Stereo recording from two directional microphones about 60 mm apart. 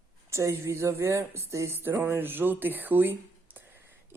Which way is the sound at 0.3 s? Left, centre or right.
Right.